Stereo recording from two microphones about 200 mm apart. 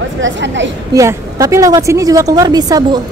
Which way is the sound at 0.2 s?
65° right (ahead or behind).